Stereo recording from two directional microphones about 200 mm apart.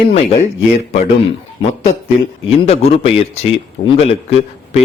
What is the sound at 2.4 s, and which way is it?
A man's voice, 30° left (ahead or behind).